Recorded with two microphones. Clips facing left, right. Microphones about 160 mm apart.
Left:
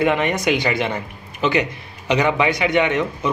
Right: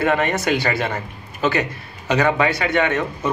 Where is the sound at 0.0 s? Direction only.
20° left (ahead or behind).